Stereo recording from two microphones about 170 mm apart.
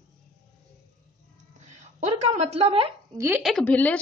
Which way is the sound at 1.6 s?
45° right (ahead or behind).